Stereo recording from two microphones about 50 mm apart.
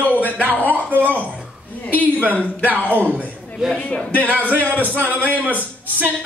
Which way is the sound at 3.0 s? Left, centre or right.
Right.